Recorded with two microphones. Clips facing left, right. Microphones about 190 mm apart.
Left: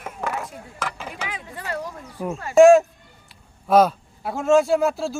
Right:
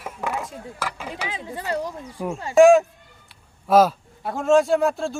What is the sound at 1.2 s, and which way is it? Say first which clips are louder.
Speech: right 4 dB; 25° right (ahead or behind).